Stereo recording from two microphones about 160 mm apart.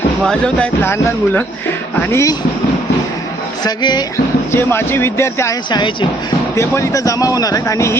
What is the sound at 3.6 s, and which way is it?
Speech, 25° left (ahead or behind).